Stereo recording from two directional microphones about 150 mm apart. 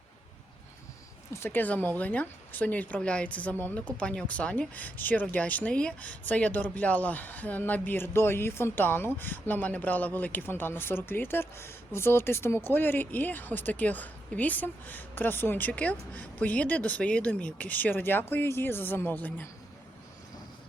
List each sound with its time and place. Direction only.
1.3 s speech: 15° left (ahead or behind)